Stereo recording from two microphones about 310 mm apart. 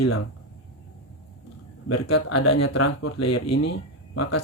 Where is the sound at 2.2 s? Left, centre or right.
Left.